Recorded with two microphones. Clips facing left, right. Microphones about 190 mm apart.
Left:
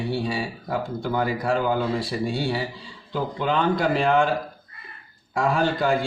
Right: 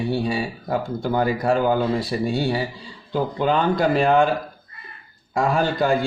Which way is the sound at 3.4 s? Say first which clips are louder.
Right 2 dB; 45° right (ahead or behind).